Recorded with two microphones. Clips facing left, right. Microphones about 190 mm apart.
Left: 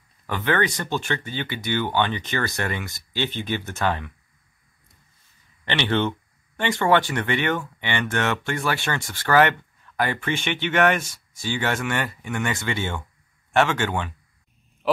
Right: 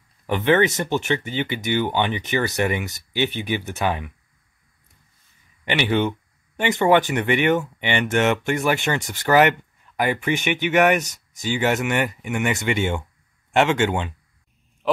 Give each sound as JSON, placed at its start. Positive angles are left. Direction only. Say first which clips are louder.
{"t": 0.3, "sound": "speech", "louder": "right 5 dB", "side_deg": -20}
{"t": 5.7, "sound": "speech", "louder": "right 2 dB", "side_deg": -10}